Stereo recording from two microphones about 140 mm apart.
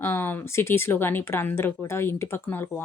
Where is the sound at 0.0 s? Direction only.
15° left (ahead or behind).